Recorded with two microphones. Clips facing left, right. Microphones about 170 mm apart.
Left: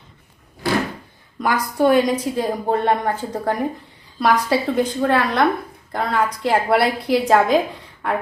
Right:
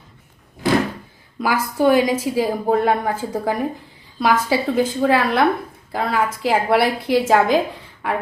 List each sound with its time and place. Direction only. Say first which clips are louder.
1.4 s a woman's voice: even; 5° right (ahead or behind)